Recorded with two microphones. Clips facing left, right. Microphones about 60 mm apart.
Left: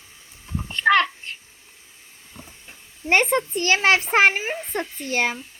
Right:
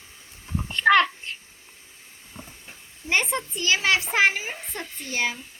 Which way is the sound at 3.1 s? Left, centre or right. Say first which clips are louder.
Left 6 dB; left.